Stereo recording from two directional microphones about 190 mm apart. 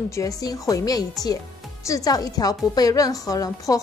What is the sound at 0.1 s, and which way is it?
A woman's voice, 20° left (ahead or behind).